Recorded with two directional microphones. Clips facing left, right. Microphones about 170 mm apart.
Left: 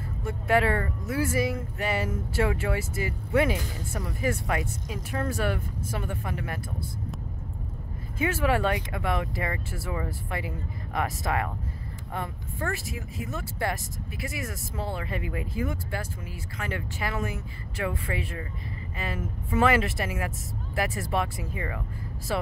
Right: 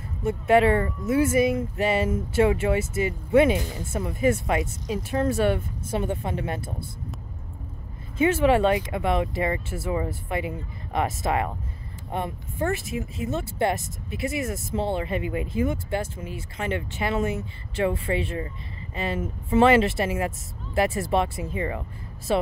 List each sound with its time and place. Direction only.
0.2 s speech: 25° right (ahead or behind)
8.2 s speech: 25° right (ahead or behind)